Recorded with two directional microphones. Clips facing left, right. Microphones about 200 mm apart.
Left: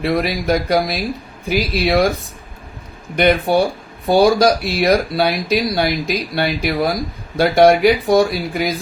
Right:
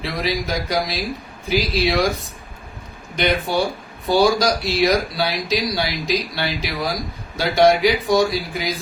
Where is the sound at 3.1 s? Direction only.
55° left (ahead or behind).